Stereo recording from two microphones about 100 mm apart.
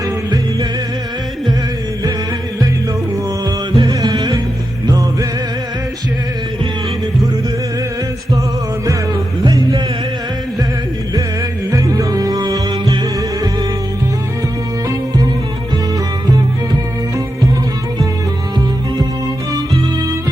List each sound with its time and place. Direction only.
3.8 s music: 40° right (ahead or behind)
9.4 s music: 45° right (ahead or behind)
11.7 s music: 35° right (ahead or behind)